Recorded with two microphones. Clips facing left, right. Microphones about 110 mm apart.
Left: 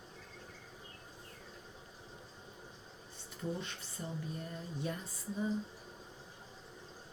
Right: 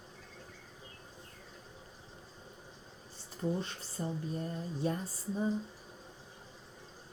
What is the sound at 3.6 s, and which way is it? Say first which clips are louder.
Speech: right 5 dB; 35° right (ahead or behind).